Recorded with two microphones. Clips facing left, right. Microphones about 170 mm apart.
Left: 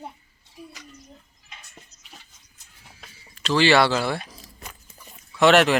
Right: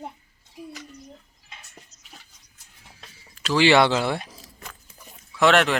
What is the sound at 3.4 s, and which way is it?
Speech, 15° right (ahead or behind).